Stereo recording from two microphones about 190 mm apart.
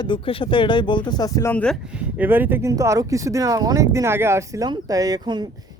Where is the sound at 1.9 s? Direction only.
5° right (ahead or behind).